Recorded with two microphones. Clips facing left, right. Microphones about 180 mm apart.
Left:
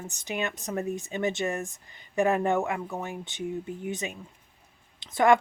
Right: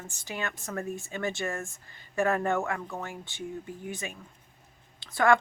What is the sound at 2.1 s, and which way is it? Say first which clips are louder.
Speech: left 3 dB; 15° left (ahead or behind).